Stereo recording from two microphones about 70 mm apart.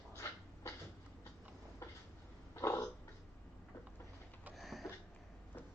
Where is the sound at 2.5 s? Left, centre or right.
Left.